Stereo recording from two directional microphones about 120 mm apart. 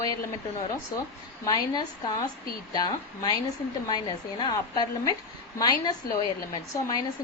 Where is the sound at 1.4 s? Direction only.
35° left (ahead or behind).